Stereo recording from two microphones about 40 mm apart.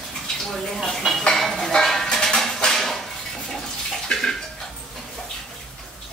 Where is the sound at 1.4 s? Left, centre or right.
Centre.